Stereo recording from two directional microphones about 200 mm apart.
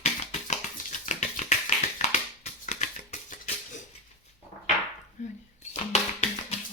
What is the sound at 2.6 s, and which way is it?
Music, 35° left (ahead or behind).